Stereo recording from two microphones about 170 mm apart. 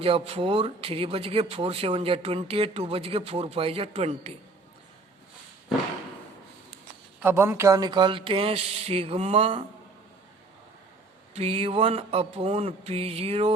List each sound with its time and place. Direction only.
0.0 s speech: 35° right (ahead or behind)
7.2 s speech: 15° right (ahead or behind); by 9.6 s 35° right (ahead or behind)
11.3 s speech: 35° right (ahead or behind)